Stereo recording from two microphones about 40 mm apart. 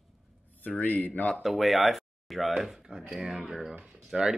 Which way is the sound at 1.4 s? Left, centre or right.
Centre.